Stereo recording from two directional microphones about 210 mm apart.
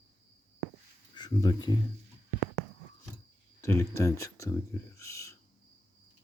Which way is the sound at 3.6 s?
15° left (ahead or behind).